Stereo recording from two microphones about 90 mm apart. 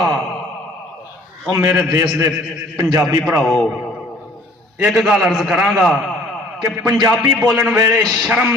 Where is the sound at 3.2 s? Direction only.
5° left (ahead or behind).